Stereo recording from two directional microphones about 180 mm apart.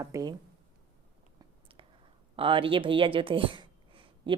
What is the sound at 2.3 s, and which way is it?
Speech, 30° right (ahead or behind).